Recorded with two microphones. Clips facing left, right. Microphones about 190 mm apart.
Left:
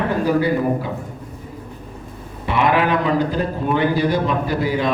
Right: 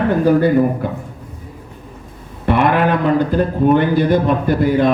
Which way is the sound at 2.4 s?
55° right (ahead or behind).